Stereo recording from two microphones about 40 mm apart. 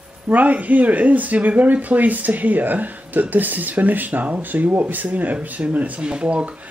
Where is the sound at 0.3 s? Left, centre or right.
Right.